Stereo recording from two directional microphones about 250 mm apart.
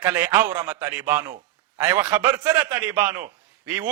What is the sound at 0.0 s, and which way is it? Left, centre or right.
A man's voice, centre.